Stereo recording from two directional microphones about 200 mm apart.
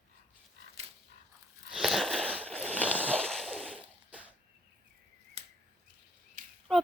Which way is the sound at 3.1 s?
5° left (ahead or behind).